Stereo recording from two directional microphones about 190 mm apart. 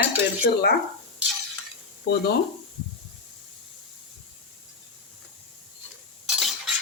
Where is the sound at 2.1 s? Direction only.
60° left (ahead or behind).